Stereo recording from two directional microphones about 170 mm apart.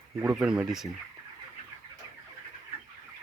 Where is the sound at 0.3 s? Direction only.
5° right (ahead or behind).